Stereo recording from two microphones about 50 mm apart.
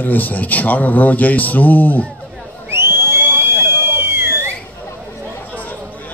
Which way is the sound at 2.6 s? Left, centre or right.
Right.